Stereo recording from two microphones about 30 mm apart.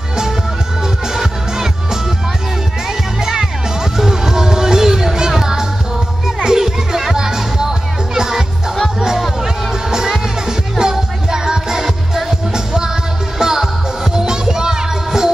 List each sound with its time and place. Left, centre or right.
1.0 s music: centre
3.2 s music: centre